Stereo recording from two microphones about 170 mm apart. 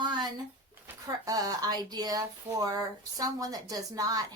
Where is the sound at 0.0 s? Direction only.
25° right (ahead or behind).